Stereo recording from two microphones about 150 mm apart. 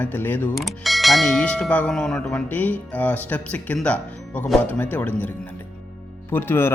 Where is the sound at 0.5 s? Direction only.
Centre (ahead or behind).